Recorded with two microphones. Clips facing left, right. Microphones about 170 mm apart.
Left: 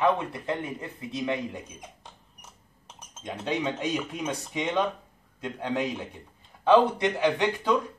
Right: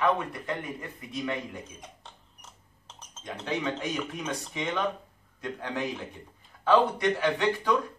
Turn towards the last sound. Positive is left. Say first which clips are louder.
# left 1 dB
turn(degrees=20)  # may be behind; listen again after turning